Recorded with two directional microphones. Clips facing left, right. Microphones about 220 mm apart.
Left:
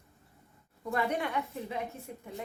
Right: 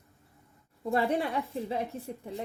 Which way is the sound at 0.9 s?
30° right (ahead or behind).